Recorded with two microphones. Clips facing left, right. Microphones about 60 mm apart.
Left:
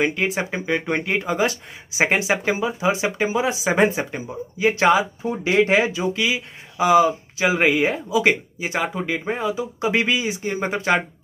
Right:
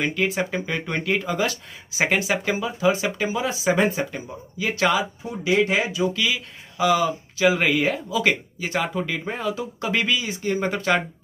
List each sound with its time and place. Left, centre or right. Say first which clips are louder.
0.0 s speech: left 2 dB; left